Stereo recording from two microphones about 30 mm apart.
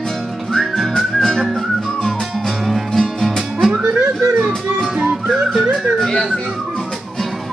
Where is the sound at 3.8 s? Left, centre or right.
Right.